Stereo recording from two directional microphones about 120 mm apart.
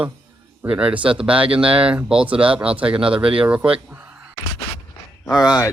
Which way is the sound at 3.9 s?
15° right (ahead or behind).